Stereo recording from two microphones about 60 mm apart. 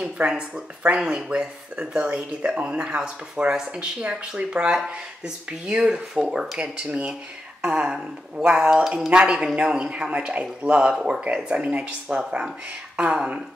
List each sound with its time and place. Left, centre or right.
0.0 s speech: centre